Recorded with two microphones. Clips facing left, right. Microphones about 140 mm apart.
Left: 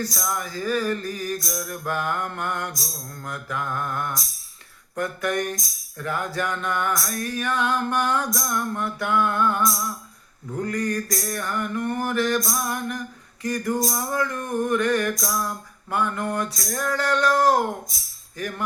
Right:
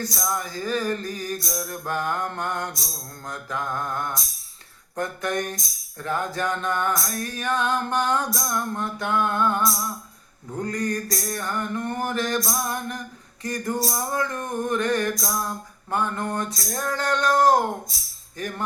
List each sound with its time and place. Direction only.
0.0 s music: 20° right (ahead or behind)